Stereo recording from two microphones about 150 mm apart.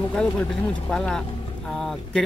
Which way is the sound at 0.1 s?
5° left (ahead or behind).